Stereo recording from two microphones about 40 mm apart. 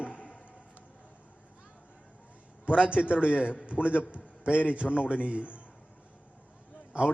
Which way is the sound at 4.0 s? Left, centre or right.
Right.